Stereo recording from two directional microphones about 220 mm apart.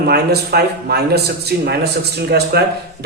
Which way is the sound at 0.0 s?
45° right (ahead or behind).